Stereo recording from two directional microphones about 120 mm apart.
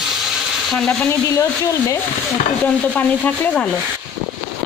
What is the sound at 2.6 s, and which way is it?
Speech, 10° left (ahead or behind).